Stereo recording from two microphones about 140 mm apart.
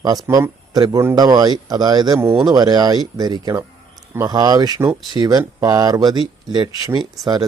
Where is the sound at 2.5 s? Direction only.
30° right (ahead or behind).